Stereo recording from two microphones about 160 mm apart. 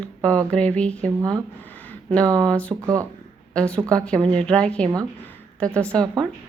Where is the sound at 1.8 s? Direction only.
5° left (ahead or behind).